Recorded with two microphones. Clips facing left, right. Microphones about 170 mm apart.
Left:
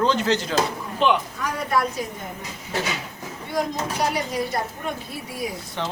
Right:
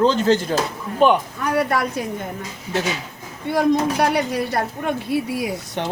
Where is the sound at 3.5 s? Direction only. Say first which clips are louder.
Right 7 dB; 65° right (ahead or behind).